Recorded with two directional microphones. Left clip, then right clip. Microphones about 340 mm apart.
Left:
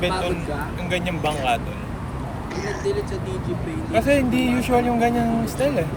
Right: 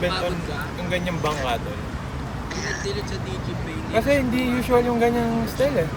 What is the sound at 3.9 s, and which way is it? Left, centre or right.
Speech, centre.